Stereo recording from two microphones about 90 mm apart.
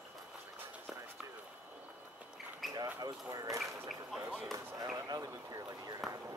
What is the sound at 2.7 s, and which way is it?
Speech, 45° right (ahead or behind).